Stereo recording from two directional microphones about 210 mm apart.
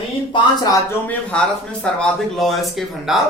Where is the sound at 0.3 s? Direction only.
15° left (ahead or behind).